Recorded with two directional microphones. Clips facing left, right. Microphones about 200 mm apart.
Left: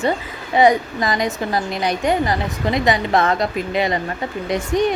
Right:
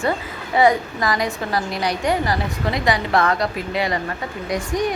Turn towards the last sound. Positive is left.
turn(degrees=25)  # may be behind; listen again after turning